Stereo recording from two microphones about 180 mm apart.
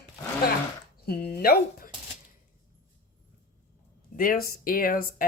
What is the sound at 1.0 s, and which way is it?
Speech, 60° left (ahead or behind).